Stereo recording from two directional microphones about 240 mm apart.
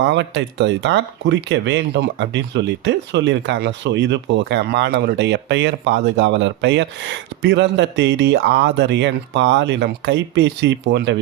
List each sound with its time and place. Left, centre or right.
0.0 s speech: right